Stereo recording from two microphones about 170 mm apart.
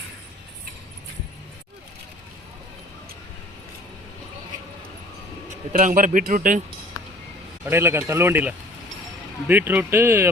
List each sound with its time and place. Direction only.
5.7 s a man's voice: 55° right (ahead or behind)
7.6 s speech: 15° right (ahead or behind)